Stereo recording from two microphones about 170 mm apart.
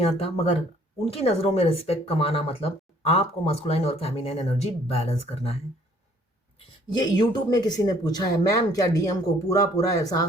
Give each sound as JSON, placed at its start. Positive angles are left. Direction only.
{"t": 0.0, "sound": "speech", "side_deg": 35}
{"t": 6.9, "sound": "speech", "side_deg": 25}